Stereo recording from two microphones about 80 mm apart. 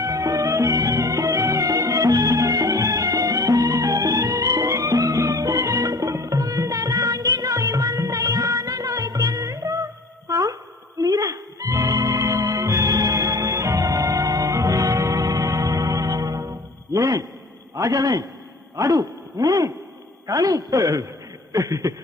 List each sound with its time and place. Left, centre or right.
0.0 s music: right
6.1 s music: right
11.0 s a sound: right
11.7 s organ: right
16.9 s music: right
17.7 s a man's voice: right
18.8 s a sound: right